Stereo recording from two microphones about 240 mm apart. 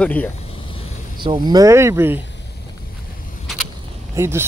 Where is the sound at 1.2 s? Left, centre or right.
Centre.